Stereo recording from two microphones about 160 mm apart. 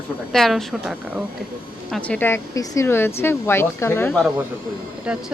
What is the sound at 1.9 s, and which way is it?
Speech, 10° left (ahead or behind).